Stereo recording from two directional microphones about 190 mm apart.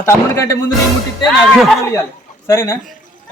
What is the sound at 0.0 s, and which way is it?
Speech, 15° left (ahead or behind).